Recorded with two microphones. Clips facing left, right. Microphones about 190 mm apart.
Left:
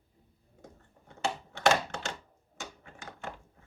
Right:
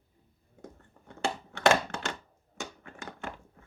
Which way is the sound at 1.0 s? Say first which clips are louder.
Right 1 dB; 60° right (ahead or behind).